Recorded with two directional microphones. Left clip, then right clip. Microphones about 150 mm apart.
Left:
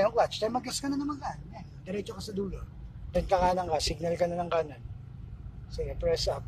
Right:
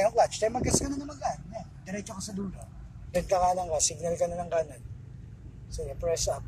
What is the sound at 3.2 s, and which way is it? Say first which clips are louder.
A man's voice: right 1 dB; 25° left (ahead or behind).